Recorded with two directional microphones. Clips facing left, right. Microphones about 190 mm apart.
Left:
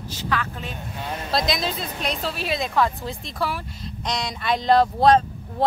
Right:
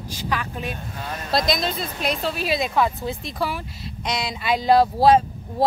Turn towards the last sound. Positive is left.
turn(degrees=-5)  # may be behind; listen again after turning